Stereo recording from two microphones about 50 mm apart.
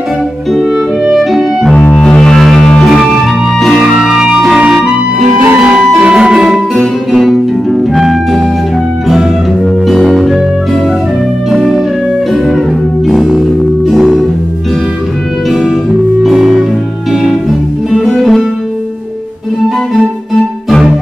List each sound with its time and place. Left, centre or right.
1.1 s music: centre
2.0 s music: centre
3.8 s music: centre
6.1 s music: centre
6.7 s music: centre
9.8 s music: centre
13.0 s music: centre
15.7 s music: centre